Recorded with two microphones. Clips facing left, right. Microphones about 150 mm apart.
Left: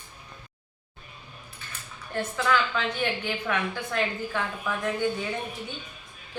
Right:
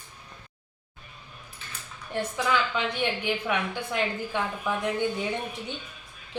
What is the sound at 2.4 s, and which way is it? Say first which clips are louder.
A woman's voice: left 1 dB; 15° right (ahead or behind).